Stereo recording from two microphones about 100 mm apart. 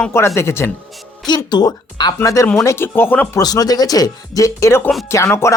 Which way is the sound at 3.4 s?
40° left (ahead or behind).